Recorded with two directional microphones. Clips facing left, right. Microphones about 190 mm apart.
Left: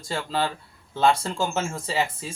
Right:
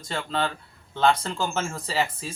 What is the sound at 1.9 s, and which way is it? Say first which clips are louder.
Speech: even; centre (ahead or behind).